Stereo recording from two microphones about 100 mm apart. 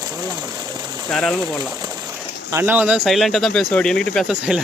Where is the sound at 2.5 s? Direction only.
20° right (ahead or behind).